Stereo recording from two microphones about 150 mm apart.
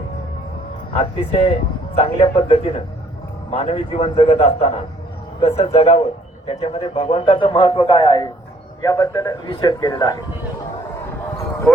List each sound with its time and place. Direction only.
0.9 s a man's voice: 40° left (ahead or behind)
6.6 s speech: 30° left (ahead or behind)
8.8 s a man's voice: 25° left (ahead or behind)